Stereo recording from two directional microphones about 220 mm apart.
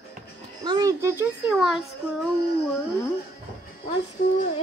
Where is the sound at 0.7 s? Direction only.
15° right (ahead or behind).